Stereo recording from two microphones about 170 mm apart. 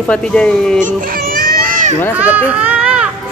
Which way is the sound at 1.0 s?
60° right (ahead or behind).